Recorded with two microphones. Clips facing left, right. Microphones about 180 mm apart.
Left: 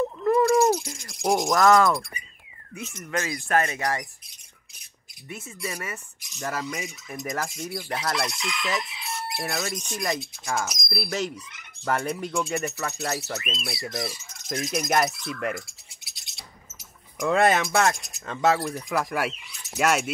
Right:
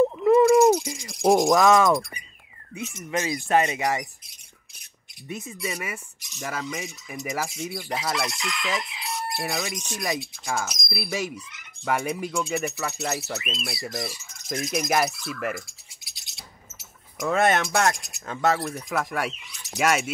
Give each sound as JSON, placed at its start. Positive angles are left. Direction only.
{"t": 0.2, "sound": "a sound", "side_deg": -5}
{"t": 0.7, "sound": "a sound", "side_deg": -15}
{"t": 1.0, "sound": "speech", "side_deg": 0}
{"t": 1.4, "sound": "speech", "side_deg": -20}
{"t": 1.9, "sound": "speech", "side_deg": 0}
{"t": 2.9, "sound": "speech", "side_deg": -15}
{"t": 5.3, "sound": "speech", "side_deg": -15}
{"t": 6.5, "sound": "speech", "side_deg": 0}